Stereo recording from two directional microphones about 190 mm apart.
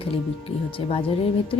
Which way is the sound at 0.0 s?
30° left (ahead or behind).